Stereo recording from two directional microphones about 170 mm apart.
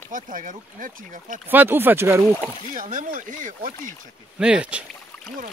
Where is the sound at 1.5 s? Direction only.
10° right (ahead or behind).